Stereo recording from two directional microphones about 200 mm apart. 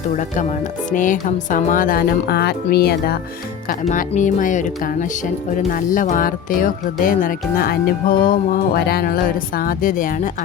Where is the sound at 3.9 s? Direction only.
40° left (ahead or behind).